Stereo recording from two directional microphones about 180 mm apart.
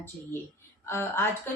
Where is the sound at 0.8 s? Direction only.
15° left (ahead or behind).